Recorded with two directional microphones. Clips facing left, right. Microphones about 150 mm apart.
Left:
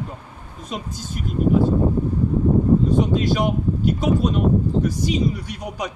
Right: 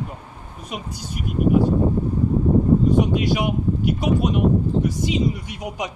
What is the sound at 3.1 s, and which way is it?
A man's voice, 15° right (ahead or behind).